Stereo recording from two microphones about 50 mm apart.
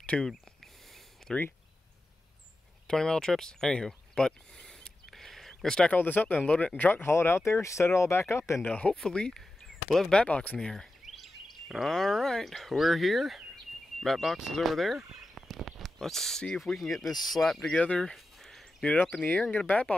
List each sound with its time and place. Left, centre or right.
0.0 s speech: left
2.9 s speech: centre
5.1 s a sound: centre
5.9 s speech: left
6.7 s speech: left
7.1 s speech: left
8.6 s speech: left
9.8 s speech: centre
10.1 s speech: left
10.6 s speech: centre
11.1 s speech: centre
17.7 s speech: left
18.1 s a sound: centre
19.5 s speech: left